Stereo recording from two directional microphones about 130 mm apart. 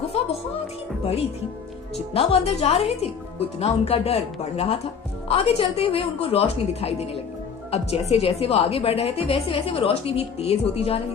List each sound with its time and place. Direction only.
2.1 s a woman's voice: 50° left (ahead or behind)